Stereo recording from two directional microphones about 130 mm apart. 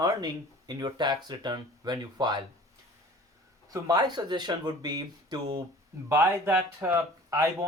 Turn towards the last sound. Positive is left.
turn(degrees=-20)  # may be behind; listen again after turning